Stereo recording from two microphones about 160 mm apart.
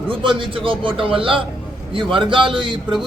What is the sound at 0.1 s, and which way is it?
A man's voice, 30° right (ahead or behind).